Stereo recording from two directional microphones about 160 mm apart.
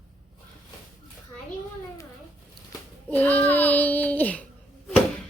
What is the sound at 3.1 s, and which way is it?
Child singing, 10° left (ahead or behind).